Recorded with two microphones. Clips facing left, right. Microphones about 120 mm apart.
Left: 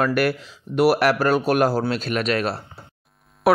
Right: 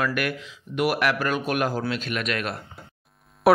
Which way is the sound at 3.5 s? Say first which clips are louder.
Even; centre (ahead or behind).